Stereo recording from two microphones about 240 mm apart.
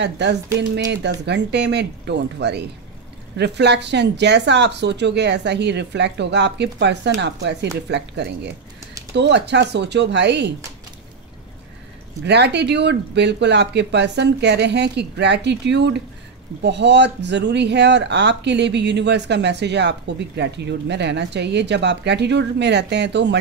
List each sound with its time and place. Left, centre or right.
0.0 s speech: right
12.3 s speech: right